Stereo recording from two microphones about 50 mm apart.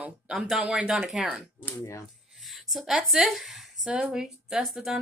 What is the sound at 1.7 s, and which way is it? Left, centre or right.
Speech, left.